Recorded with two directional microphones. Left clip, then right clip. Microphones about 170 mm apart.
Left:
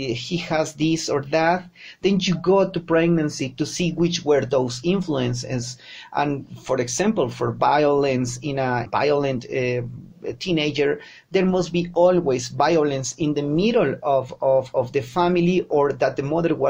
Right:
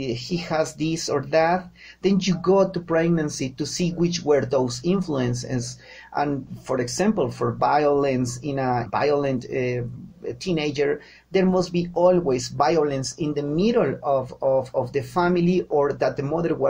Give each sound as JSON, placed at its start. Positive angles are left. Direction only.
{"t": 0.0, "sound": "speech", "side_deg": 25}